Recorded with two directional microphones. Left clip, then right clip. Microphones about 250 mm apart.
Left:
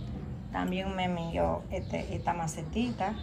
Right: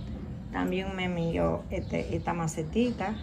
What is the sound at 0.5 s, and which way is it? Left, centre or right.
A woman's voice, centre.